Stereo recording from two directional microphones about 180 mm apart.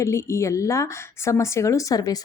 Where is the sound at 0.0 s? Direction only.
15° left (ahead or behind).